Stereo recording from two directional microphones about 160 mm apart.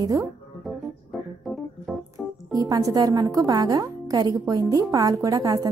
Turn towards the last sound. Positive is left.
turn(degrees=-20)  # may be behind; listen again after turning